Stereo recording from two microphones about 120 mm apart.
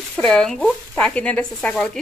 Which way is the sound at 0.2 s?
5° left (ahead or behind).